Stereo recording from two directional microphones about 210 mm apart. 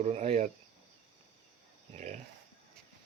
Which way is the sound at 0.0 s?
30° right (ahead or behind).